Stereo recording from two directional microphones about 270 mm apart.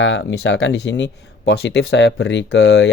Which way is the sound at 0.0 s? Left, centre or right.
Left.